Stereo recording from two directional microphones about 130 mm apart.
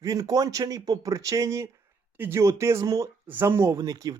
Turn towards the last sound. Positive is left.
turn(degrees=-30)  # may be behind; listen again after turning